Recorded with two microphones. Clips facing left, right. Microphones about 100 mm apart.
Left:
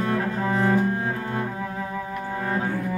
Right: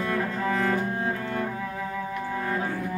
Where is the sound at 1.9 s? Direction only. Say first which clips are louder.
Left 1 dB; 25° left (ahead or behind).